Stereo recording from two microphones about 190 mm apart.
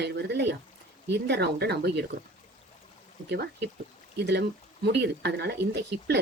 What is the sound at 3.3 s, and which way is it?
Speech, 60° right (ahead or behind).